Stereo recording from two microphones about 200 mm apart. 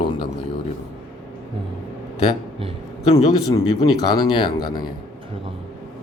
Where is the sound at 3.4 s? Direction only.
25° left (ahead or behind).